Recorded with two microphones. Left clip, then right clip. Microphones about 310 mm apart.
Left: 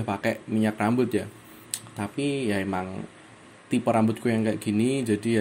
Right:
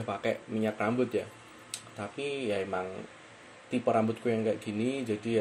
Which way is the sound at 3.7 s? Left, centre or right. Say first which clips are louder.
Left 4 dB; left.